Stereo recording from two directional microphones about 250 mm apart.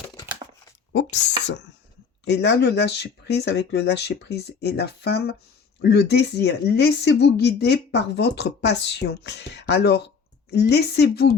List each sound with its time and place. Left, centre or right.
2.2 s a woman's voice: left